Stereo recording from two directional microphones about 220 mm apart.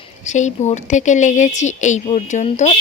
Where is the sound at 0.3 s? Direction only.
35° left (ahead or behind).